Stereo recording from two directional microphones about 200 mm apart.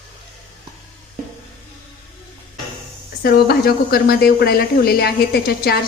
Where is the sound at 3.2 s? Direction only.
50° left (ahead or behind).